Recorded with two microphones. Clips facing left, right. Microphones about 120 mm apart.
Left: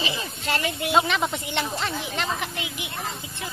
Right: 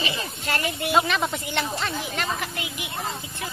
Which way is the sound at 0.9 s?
15° left (ahead or behind).